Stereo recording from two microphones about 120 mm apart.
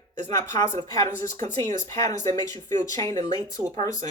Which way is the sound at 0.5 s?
75° right (ahead or behind).